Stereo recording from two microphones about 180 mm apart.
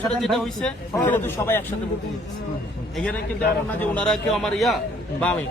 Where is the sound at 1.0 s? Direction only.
15° left (ahead or behind).